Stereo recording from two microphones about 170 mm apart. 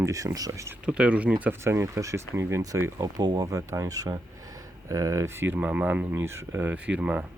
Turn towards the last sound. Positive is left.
turn(degrees=-5)  # may be behind; listen again after turning